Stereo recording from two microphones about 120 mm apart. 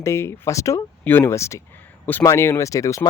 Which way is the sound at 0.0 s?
25° left (ahead or behind).